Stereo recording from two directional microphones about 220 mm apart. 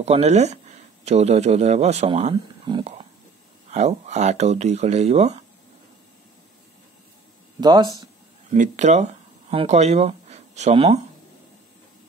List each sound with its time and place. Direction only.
0.0 s a man's voice: 30° right (ahead or behind)
7.6 s speech: 20° right (ahead or behind)
8.5 s speech: 35° right (ahead or behind)